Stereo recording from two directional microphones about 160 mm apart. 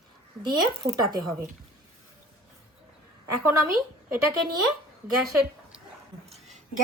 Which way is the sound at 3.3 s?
20° right (ahead or behind).